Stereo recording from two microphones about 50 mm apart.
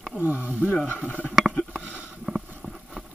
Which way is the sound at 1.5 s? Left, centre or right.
Centre.